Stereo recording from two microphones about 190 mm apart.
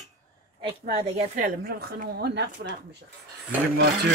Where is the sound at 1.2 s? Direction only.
55° right (ahead or behind).